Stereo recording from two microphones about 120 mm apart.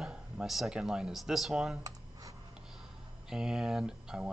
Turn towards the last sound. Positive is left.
turn(degrees=-5)  # may be behind; listen again after turning